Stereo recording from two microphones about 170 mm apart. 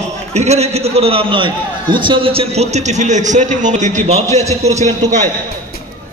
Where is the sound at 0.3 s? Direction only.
40° right (ahead or behind).